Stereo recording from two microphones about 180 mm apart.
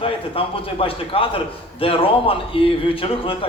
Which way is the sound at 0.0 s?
30° left (ahead or behind).